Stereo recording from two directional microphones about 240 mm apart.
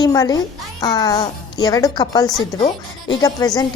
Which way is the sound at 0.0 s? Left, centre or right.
Centre.